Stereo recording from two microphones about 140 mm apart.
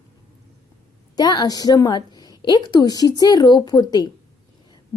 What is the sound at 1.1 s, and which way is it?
A woman's voice, 30° left (ahead or behind).